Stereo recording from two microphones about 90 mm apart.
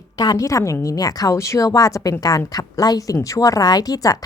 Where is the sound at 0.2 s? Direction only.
40° left (ahead or behind).